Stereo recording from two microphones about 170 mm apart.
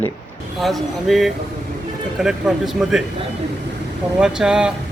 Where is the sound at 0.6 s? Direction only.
Centre (ahead or behind).